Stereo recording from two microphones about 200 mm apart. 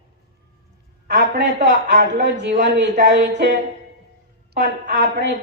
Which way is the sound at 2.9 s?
45° right (ahead or behind).